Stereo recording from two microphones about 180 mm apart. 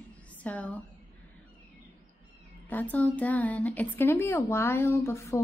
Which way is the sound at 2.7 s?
10° left (ahead or behind).